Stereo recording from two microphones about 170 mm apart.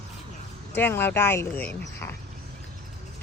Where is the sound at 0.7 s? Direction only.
10° left (ahead or behind).